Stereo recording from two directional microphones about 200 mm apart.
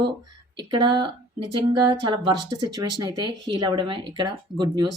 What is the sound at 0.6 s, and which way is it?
Speech, 25° right (ahead or behind).